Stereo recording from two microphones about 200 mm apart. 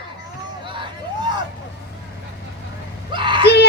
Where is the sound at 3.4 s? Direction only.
55° left (ahead or behind).